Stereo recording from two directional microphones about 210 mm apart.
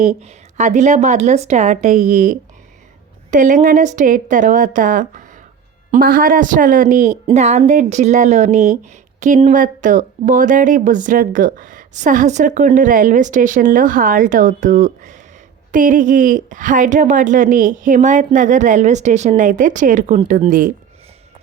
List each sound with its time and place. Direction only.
0.0 s a woman's voice: 35° right (ahead or behind)